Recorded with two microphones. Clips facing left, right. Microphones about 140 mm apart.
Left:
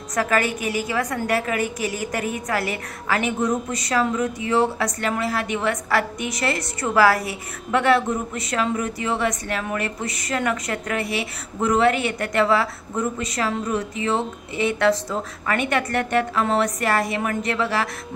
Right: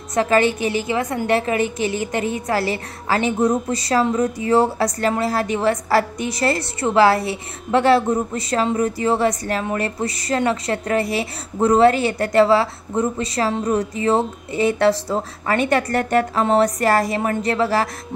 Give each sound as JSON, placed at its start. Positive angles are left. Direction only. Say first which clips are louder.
{"t": 0.1, "sound": "a woman's voice", "louder": "right 5 dB", "side_deg": -25}